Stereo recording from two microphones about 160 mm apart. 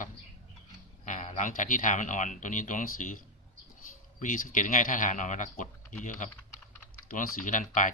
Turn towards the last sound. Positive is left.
turn(degrees=55)  # may be behind; listen again after turning